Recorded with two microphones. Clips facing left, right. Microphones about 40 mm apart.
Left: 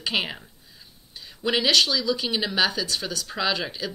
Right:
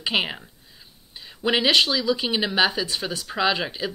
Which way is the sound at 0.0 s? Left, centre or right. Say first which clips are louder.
Right 2 dB; centre.